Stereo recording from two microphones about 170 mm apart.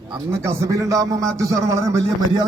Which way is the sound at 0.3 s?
15° right (ahead or behind).